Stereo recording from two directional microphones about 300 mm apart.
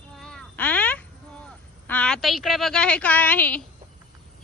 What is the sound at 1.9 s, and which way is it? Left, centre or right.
A woman's voice, centre.